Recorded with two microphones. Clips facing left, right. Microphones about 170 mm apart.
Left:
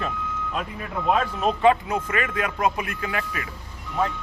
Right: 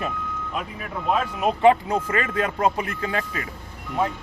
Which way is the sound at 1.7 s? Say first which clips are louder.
Right 3 dB; 30° right (ahead or behind).